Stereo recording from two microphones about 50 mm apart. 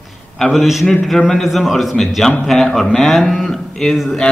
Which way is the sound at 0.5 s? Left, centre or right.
Centre.